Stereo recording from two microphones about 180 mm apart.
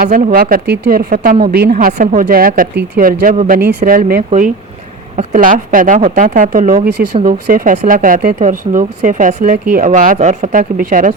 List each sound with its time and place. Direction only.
0.0 s speech: 50° right (ahead or behind)
6.8 s speech: 65° right (ahead or behind)
7.3 s speech: 50° right (ahead or behind)